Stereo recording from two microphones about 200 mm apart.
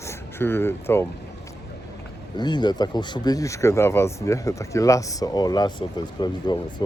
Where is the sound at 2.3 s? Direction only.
20° left (ahead or behind).